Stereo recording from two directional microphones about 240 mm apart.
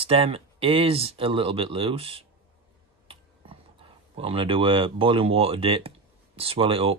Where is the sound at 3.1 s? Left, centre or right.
Right.